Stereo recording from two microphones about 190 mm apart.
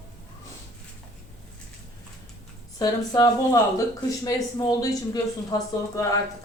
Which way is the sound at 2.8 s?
20° left (ahead or behind).